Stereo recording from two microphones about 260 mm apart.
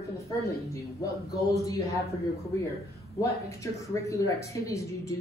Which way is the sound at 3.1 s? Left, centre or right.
Centre.